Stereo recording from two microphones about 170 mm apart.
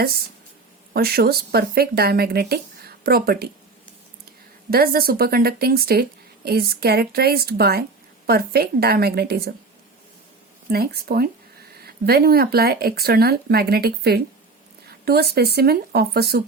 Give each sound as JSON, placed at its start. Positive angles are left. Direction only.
{"t": 0.9, "sound": "speech", "side_deg": -65}
{"t": 10.7, "sound": "speech", "side_deg": -65}